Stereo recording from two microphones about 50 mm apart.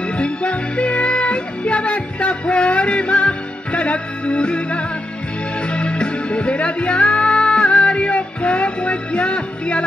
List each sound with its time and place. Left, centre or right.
0.2 s music: left